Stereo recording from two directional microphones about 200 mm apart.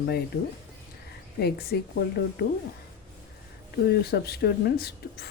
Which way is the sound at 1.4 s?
50° left (ahead or behind).